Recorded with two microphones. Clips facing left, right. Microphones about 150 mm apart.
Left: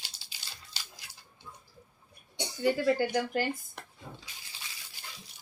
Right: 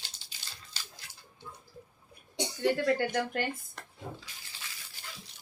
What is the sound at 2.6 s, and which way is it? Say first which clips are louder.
A woman's voice: left 1 dB; 5° left (ahead or behind).